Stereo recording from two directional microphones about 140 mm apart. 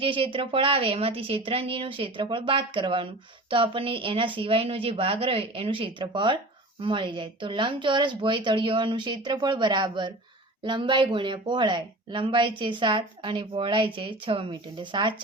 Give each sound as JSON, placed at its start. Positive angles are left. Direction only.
{"t": 0.0, "sound": "speech", "side_deg": -40}